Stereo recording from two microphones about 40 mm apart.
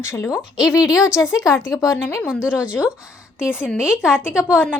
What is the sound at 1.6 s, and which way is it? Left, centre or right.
Speech, left.